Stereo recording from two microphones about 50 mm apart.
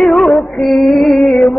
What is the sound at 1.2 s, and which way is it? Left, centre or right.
Music, centre.